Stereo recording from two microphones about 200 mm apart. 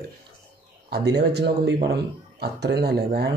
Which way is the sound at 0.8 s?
55° right (ahead or behind).